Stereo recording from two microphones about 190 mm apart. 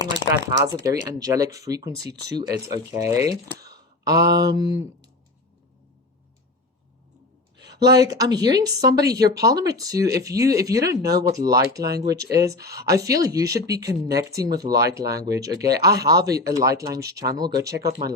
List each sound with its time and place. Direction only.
0.6 s speech: 15° right (ahead or behind)
7.7 s speech: 20° right (ahead or behind)